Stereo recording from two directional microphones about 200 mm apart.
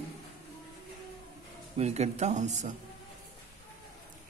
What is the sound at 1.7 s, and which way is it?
Speech, 35° right (ahead or behind).